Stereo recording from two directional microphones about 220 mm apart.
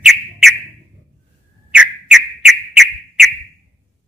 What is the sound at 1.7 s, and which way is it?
Whistle, 5° right (ahead or behind).